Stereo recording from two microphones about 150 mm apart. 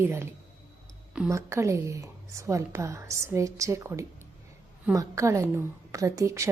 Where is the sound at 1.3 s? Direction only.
20° right (ahead or behind).